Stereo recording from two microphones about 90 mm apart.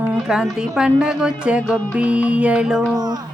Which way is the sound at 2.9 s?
50° right (ahead or behind).